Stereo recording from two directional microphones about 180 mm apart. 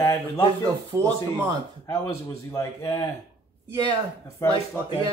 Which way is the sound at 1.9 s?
20° left (ahead or behind).